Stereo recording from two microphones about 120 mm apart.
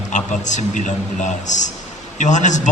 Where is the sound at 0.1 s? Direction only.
90° left.